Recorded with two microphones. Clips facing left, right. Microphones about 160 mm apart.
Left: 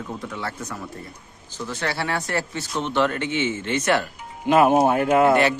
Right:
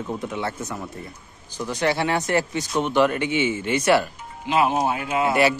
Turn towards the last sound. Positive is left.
turn(degrees=55)  # may be behind; listen again after turning